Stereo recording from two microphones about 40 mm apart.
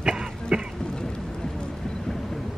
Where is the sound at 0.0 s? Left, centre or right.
Right.